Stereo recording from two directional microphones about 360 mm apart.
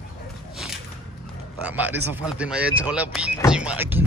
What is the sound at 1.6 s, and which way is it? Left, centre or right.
Speech, centre.